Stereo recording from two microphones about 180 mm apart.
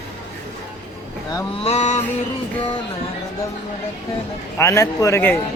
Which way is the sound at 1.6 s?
35° left (ahead or behind).